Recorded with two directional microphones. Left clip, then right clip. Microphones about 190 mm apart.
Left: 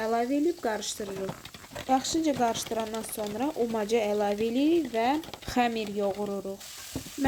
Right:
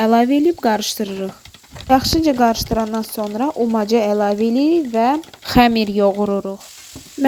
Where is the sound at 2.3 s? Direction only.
40° right (ahead or behind).